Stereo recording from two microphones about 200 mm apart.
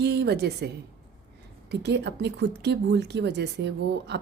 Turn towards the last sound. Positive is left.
turn(degrees=-60)  # may be behind; listen again after turning